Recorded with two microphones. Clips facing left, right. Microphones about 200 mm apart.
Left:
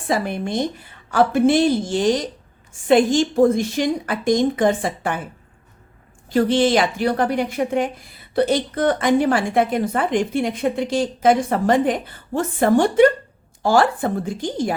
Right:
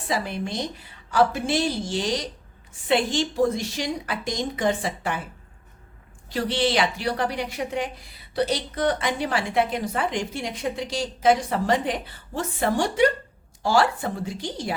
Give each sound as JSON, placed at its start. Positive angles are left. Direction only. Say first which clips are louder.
{"t": 0.1, "sound": "a woman's voice", "louder": "left 6 dB", "side_deg": 50}
{"t": 6.2, "sound": "a woman's voice", "louder": "left 8 dB", "side_deg": 50}